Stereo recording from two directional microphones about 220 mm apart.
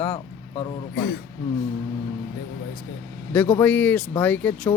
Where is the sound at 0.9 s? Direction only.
45° left (ahead or behind).